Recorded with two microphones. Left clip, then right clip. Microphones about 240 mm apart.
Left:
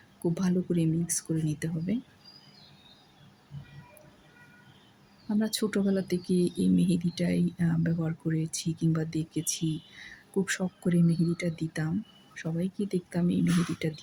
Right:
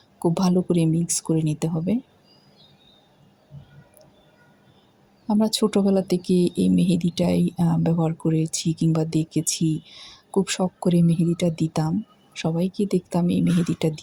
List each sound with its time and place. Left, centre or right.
0.2 s speech: right
5.4 s speech: centre